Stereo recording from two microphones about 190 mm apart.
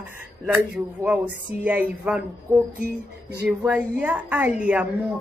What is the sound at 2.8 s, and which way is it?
Music, 60° right (ahead or behind).